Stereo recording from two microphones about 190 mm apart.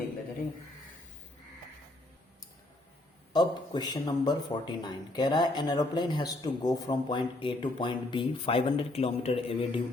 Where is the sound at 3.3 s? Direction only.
20° left (ahead or behind).